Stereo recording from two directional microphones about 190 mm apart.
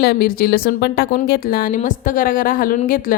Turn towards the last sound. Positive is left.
turn(degrees=45)  # may be behind; listen again after turning